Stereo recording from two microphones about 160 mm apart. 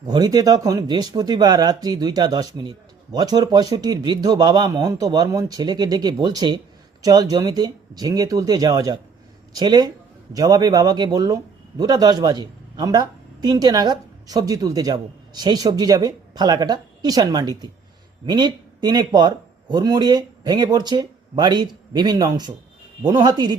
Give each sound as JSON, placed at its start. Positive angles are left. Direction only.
{"t": 0.0, "sound": "a man's voice", "side_deg": -25}